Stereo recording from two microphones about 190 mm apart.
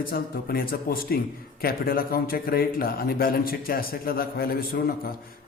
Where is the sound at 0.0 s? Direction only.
50° left (ahead or behind).